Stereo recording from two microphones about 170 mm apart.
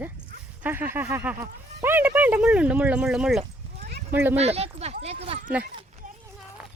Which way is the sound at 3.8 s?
65° right (ahead or behind).